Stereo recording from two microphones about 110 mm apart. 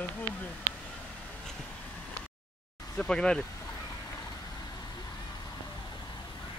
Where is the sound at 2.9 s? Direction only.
5° left (ahead or behind).